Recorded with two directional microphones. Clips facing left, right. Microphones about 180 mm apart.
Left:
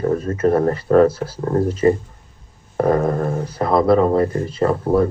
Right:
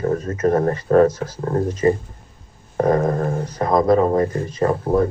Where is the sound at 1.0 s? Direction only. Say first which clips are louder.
Left 1 dB; 30° left (ahead or behind).